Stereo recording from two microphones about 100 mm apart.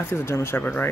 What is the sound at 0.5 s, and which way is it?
Speech, 15° left (ahead or behind).